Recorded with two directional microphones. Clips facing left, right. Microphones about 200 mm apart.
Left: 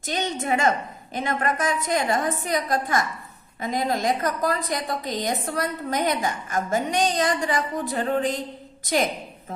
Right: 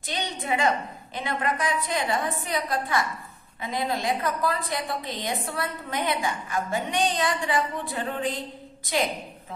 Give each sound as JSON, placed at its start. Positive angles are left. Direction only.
{"t": 0.0, "sound": "a woman's voice", "side_deg": 45}